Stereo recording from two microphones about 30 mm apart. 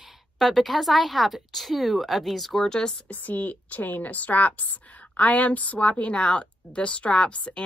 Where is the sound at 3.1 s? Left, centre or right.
Left.